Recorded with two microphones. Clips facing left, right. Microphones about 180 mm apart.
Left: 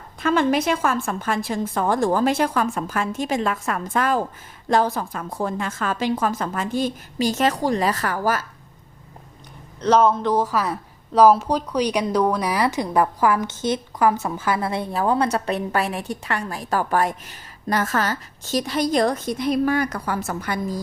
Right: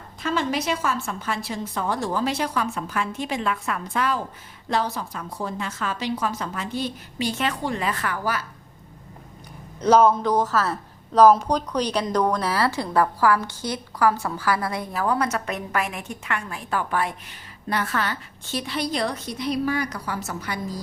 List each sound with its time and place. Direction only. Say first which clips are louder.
0.2 s a woman's voice: left 6 dB; 55° left (ahead or behind)
9.8 s a woman's voice: even; 5° right (ahead or behind); by 20.8 s 50° left (ahead or behind)